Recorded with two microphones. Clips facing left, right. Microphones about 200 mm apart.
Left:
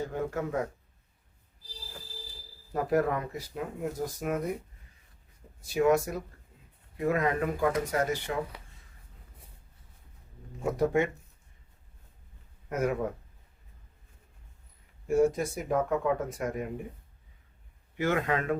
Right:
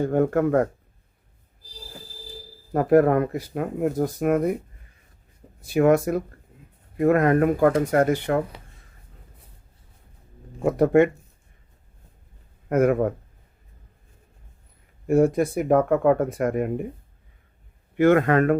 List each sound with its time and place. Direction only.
0.0 s speech: 55° right (ahead or behind)
2.7 s speech: 60° right (ahead or behind)
5.6 s speech: 60° right (ahead or behind)
10.6 s speech: 60° right (ahead or behind)
12.6 s speech: 60° right (ahead or behind)
15.0 s speech: 60° right (ahead or behind)
17.9 s speech: 60° right (ahead or behind)